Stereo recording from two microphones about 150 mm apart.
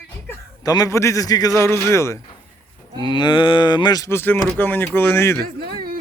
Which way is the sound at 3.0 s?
30° left (ahead or behind).